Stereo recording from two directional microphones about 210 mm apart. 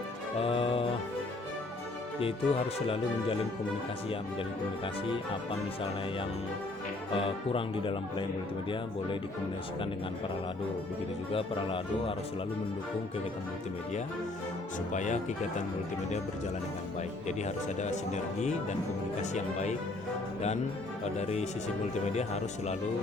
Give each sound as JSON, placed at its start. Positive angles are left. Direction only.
{"t": 0.3, "sound": "music", "side_deg": 25}
{"t": 2.2, "sound": "speech", "side_deg": 25}
{"t": 7.1, "sound": "speech", "side_deg": 25}
{"t": 11.3, "sound": "speech", "side_deg": 25}
{"t": 14.9, "sound": "speech", "side_deg": 35}
{"t": 17.2, "sound": "speech", "side_deg": 35}
{"t": 21.2, "sound": "speech", "side_deg": 30}